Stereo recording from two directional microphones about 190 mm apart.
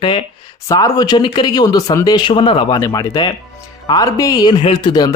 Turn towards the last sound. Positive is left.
turn(degrees=20)  # may be behind; listen again after turning